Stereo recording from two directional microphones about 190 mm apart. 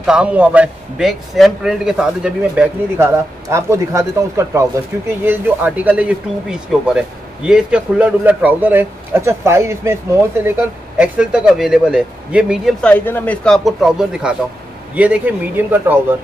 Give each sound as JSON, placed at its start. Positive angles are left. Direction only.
{"t": 0.0, "sound": "a man's voice", "side_deg": -5}
{"t": 11.0, "sound": "a man's voice", "side_deg": -5}
{"t": 12.8, "sound": "a man's voice", "side_deg": 10}